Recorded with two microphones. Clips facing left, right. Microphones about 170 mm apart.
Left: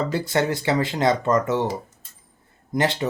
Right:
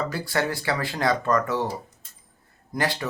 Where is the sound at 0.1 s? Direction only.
20° left (ahead or behind).